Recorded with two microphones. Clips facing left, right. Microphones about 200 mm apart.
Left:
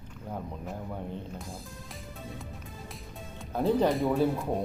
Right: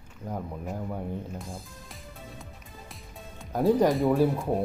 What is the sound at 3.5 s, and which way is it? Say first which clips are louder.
Speech: right 3 dB; 10° right (ahead or behind).